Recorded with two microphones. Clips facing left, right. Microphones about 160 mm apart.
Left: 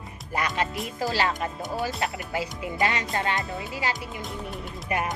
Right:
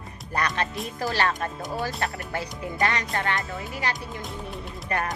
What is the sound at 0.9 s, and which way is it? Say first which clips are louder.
Speech: even; 15° left (ahead or behind).